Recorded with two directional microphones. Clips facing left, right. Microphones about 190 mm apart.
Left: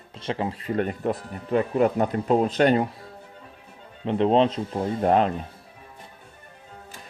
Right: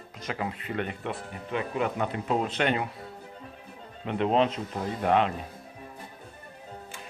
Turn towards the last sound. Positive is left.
turn(degrees=40)  # may be behind; listen again after turning